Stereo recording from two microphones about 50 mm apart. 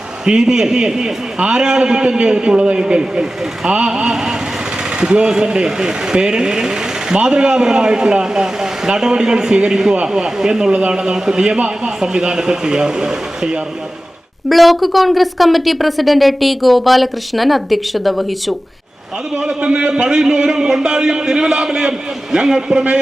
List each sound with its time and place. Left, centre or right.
0.3 s a man's voice: centre
14.5 s a woman's voice: centre
19.4 s a man's voice: centre